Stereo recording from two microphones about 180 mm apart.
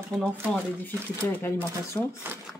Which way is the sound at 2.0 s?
15° left (ahead or behind).